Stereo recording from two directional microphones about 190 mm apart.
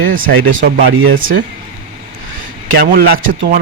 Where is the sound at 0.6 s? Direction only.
50° right (ahead or behind).